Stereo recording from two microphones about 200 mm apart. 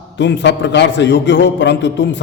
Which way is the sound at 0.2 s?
60° left (ahead or behind).